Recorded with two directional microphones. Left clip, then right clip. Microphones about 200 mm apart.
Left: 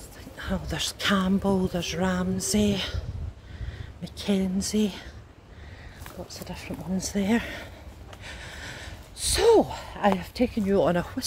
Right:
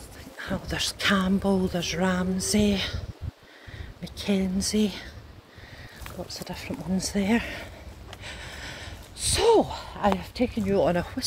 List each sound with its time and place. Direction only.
0.4 s speech: centre (ahead or behind)
4.0 s speech: 5° left (ahead or behind)
6.2 s speech: 15° right (ahead or behind)
7.0 s speech: 5° right (ahead or behind)
8.2 s a sound: centre (ahead or behind)
9.2 s a sound: 20° left (ahead or behind)
10.1 s speech: 20° left (ahead or behind)